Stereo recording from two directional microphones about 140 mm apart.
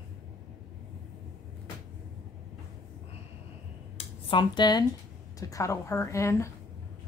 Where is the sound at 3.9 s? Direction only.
35° left (ahead or behind).